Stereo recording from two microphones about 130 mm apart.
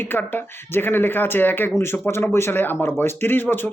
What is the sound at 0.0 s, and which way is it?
Speech, 15° left (ahead or behind).